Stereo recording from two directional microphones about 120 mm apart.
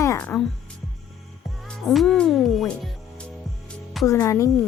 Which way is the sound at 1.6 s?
Centre (ahead or behind).